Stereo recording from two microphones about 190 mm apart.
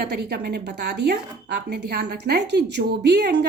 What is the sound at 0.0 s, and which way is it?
A woman's voice, 60° right (ahead or behind).